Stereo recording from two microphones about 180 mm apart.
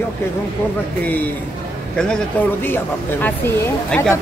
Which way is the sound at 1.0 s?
10° left (ahead or behind).